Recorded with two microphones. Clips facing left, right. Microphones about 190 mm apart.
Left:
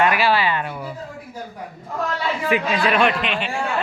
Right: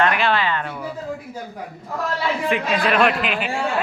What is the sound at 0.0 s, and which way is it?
Speech, 5° left (ahead or behind).